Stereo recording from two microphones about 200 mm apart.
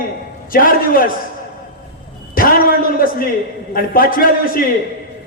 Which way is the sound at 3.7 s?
45° left (ahead or behind).